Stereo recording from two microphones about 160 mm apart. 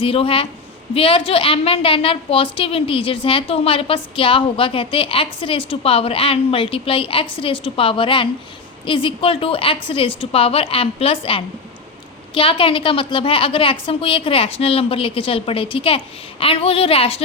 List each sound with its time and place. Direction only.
0.0 s a woman's voice: 35° left (ahead or behind)